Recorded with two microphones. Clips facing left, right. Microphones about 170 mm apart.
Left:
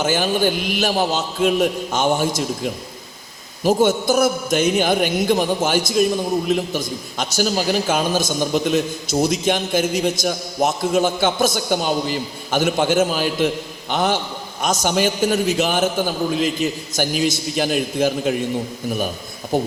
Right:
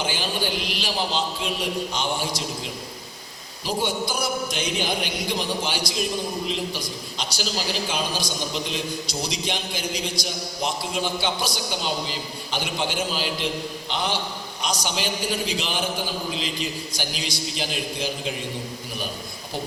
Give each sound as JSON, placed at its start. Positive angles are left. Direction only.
{"t": 0.0, "sound": "a man's voice", "side_deg": 50}
{"t": 19.5, "sound": "a man's voice", "side_deg": 50}